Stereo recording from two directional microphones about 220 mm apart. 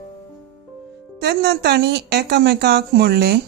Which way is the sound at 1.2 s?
50° right (ahead or behind).